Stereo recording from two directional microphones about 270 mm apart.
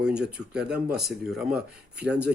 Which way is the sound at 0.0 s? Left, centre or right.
Centre.